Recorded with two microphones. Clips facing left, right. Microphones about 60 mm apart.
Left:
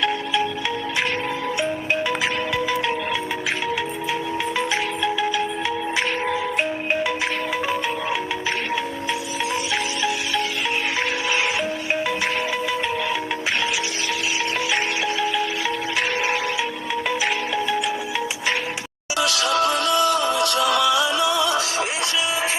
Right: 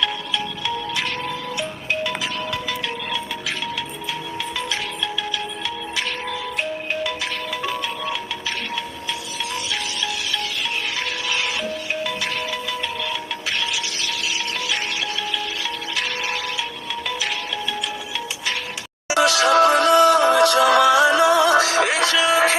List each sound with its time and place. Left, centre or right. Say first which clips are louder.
6.2 s music: left 4 dB; centre
19.1 s music: right 5 dB; right
20.3 s music: right 5 dB; right